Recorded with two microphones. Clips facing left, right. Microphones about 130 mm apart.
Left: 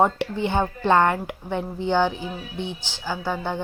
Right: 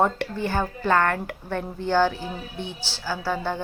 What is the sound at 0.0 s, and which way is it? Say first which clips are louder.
A woman's voice: left 2 dB; 15° left (ahead or behind).